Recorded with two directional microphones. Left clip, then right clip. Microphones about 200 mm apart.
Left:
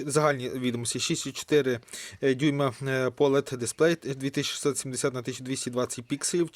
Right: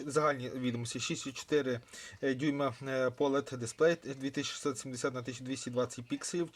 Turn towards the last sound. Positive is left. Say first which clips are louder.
# left 8 dB
turn(degrees=45)  # may be behind; listen again after turning